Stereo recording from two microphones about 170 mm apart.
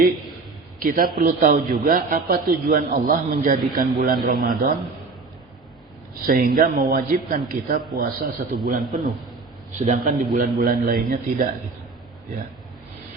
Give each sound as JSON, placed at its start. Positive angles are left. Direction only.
{"t": 0.8, "sound": "speech", "side_deg": -55}
{"t": 2.2, "sound": "a man's voice", "side_deg": -60}
{"t": 6.2, "sound": "a man's voice", "side_deg": -60}